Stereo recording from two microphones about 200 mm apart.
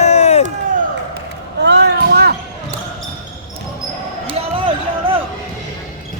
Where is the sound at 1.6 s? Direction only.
60° right (ahead or behind).